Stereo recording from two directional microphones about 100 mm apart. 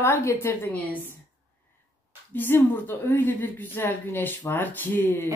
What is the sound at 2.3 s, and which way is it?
Speech, 20° left (ahead or behind).